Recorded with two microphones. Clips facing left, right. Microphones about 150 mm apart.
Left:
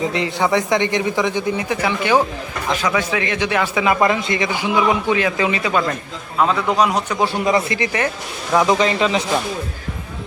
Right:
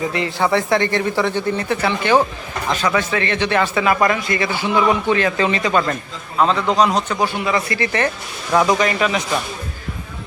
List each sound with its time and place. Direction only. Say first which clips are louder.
0.0 s speech: even; 20° left (ahead or behind)
7.2 s speech: left 2 dB; 35° left (ahead or behind)
7.7 s speech: right 1 dB; 15° left (ahead or behind)
8.8 s speech: left 1 dB; 25° left (ahead or behind)